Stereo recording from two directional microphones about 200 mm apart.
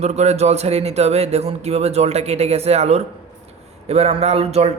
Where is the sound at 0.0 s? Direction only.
35° right (ahead or behind).